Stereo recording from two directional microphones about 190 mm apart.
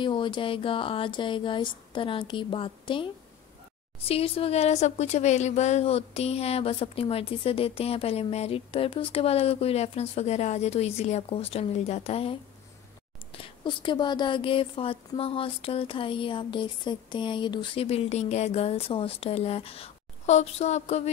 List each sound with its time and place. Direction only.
0.0 s speech: 25° left (ahead or behind)